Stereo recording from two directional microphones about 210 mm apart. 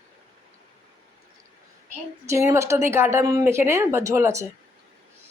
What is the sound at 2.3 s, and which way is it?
A woman's voice, 15° right (ahead or behind).